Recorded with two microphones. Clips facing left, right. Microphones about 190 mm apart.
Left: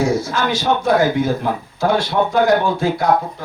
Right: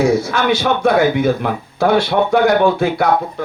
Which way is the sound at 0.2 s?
65° right (ahead or behind).